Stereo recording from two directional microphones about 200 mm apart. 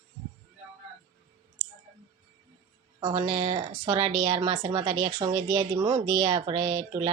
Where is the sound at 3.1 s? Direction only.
25° right (ahead or behind).